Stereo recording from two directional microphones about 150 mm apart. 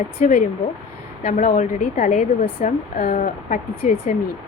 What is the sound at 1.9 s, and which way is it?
Speech, 50° left (ahead or behind).